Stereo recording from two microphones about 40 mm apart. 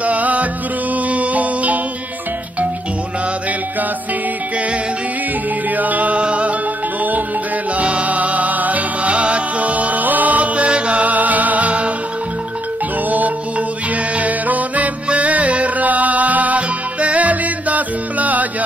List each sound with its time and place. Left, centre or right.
0.0 s music: right
5.8 s music: right
7.7 s music: right
14.1 s music: right